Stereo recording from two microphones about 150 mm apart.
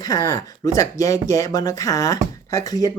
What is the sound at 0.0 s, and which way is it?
Speech, 25° left (ahead or behind).